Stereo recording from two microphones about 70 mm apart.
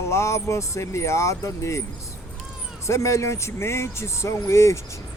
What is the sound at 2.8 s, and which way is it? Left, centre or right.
Speech, left.